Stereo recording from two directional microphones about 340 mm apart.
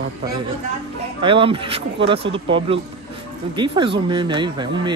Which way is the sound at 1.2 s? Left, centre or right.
Centre.